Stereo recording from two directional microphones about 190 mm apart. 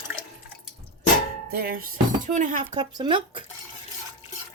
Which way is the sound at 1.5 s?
50° right (ahead or behind).